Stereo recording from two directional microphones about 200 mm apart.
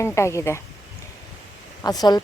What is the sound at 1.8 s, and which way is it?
Speech, 20° left (ahead or behind).